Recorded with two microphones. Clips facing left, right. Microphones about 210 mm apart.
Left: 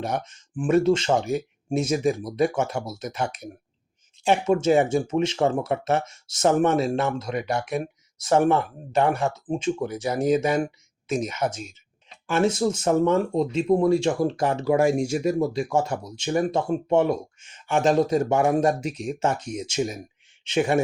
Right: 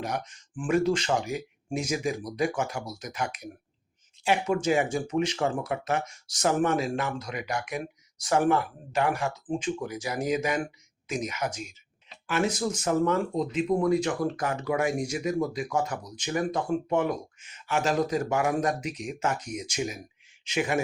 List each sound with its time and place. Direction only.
0.0 s speech: 25° left (ahead or behind)
4.3 s speech: 25° left (ahead or behind)